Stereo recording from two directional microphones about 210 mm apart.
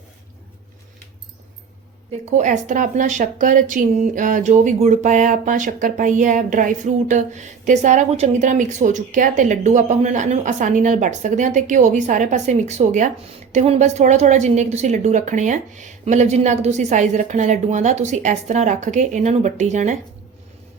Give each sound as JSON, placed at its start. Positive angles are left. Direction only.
{"t": 2.3, "sound": "speech", "side_deg": -35}